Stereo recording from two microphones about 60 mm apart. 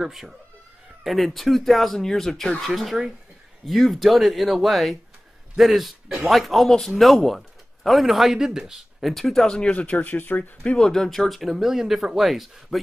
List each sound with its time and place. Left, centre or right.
0.0 s speech: centre
9.1 s speech: centre; by 10.4 s left
10.6 s speech: centre